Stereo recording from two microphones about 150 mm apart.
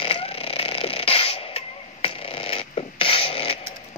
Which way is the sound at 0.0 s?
40° left (ahead or behind).